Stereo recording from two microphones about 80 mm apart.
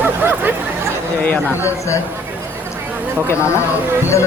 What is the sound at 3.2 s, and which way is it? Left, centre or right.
Speech, left.